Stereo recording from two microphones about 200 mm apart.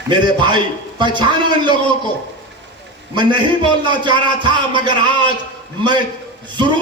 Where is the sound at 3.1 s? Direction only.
25° right (ahead or behind).